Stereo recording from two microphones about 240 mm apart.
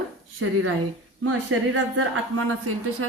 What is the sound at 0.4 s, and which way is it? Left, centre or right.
A woman's voice, right.